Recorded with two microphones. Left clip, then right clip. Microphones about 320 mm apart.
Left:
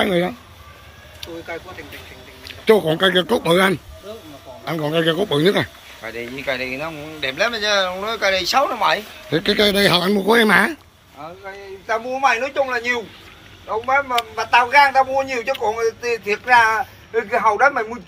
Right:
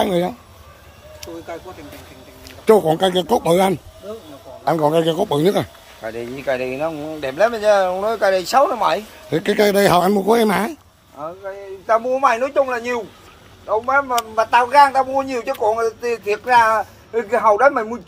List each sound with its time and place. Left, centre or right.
0.0 s speech: centre
2.6 s speech: centre
6.0 s a man's voice: right
9.3 s speech: centre
12.1 s a man's voice: right
13.7 s a man's voice: right